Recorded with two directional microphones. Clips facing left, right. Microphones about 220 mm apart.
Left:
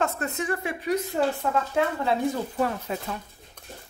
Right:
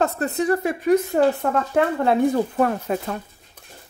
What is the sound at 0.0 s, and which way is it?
Speech, 35° right (ahead or behind).